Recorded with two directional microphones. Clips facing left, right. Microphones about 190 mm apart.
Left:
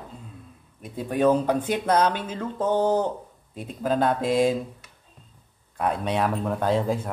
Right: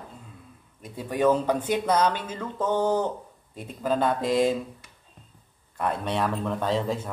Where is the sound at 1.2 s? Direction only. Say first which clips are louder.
Left 1 dB; 15° left (ahead or behind).